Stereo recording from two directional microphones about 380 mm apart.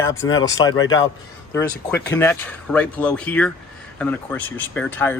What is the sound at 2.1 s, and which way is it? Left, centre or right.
Speech, centre.